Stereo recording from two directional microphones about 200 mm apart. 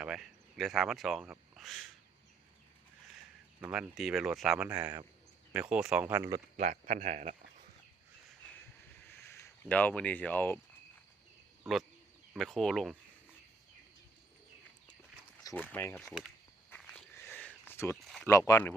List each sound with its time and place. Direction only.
0.0 s speech: centre (ahead or behind)
3.6 s speech: 5° right (ahead or behind)
6.6 s speech: 40° right (ahead or behind)
9.0 s a sound: 10° left (ahead or behind)
12.3 s speech: centre (ahead or behind)
15.4 s speech: 10° left (ahead or behind)
16.6 s walk: 10° left (ahead or behind)
18.3 s speech: 15° left (ahead or behind)